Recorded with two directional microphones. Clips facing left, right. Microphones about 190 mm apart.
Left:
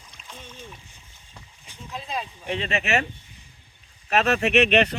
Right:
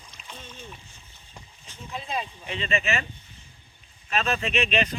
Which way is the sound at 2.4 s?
65° left (ahead or behind).